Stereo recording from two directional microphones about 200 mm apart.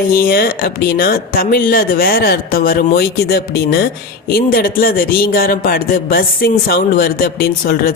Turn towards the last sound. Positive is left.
turn(degrees=50)  # may be behind; listen again after turning